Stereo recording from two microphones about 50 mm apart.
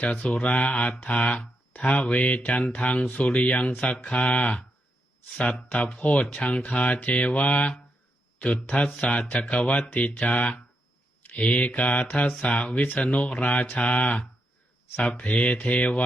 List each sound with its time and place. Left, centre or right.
0.0 s speech: left
5.6 s speech: left
15.2 s speech: left